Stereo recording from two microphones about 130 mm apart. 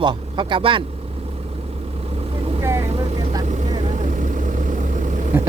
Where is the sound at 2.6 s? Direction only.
20° right (ahead or behind).